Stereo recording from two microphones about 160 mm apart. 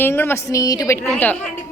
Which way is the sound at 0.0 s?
15° left (ahead or behind).